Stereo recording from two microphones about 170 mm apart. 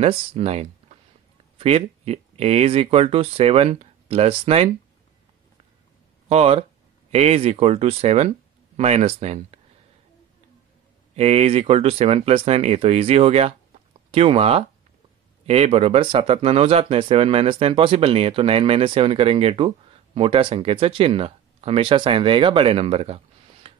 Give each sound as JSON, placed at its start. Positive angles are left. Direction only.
{"t": 0.0, "sound": "speech", "side_deg": -35}
{"t": 6.2, "sound": "speech", "side_deg": -35}
{"t": 11.1, "sound": "speech", "side_deg": -35}